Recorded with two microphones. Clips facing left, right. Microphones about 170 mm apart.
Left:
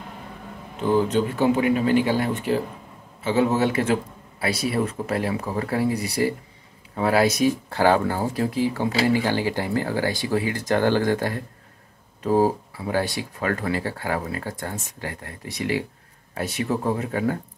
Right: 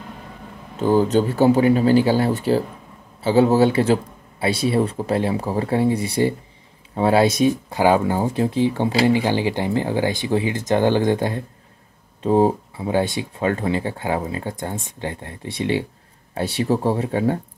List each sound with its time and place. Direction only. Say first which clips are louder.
0.7 s speech: right 4 dB; 35° right (ahead or behind)